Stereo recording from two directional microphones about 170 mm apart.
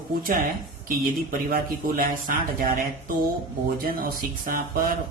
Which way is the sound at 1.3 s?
55° right (ahead or behind).